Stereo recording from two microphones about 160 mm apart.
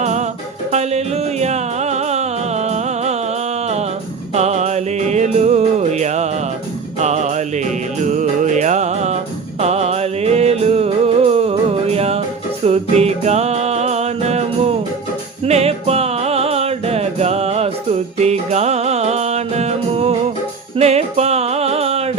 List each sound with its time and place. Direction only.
0.0 s music: 45° right (ahead or behind)
4.4 s music: 45° right (ahead or behind)